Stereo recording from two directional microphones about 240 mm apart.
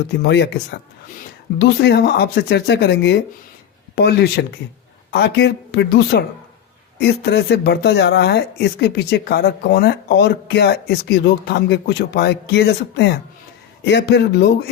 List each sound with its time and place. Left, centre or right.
0.1 s speech: left